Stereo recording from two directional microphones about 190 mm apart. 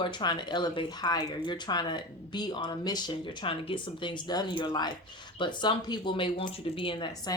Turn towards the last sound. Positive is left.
turn(degrees=20)  # may be behind; listen again after turning